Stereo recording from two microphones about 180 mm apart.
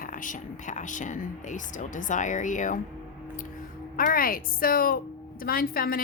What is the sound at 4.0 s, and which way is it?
Speech, 55° left (ahead or behind).